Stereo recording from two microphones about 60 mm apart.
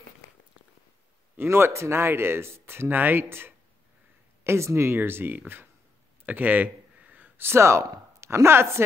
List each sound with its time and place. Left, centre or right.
1.3 s speech: right
6.2 s a sound: right
7.3 s a woman's voice: right